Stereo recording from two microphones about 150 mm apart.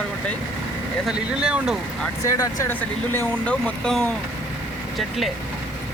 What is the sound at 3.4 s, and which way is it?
Speech, 5° left (ahead or behind).